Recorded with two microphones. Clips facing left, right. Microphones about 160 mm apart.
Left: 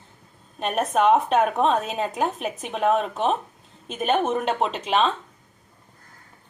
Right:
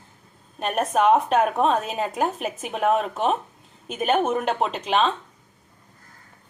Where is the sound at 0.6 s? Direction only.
Centre (ahead or behind).